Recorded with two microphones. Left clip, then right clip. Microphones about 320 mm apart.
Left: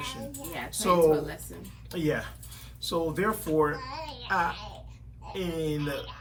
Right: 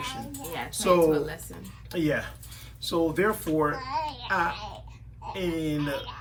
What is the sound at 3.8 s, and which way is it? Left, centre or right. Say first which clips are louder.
Speech: right 7 dB; centre.